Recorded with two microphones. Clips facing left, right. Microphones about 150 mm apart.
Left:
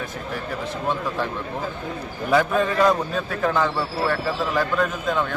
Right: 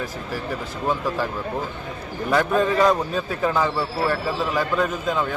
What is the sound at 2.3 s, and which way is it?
A man's voice, centre (ahead or behind).